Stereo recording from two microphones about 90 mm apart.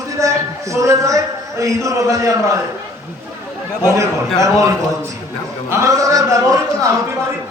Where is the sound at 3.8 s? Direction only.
35° right (ahead or behind).